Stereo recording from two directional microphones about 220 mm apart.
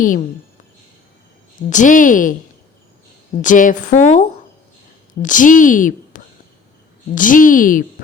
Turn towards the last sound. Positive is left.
turn(degrees=40)  # may be behind; listen again after turning